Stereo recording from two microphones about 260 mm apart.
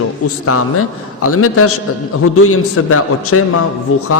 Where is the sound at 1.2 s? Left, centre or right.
Left.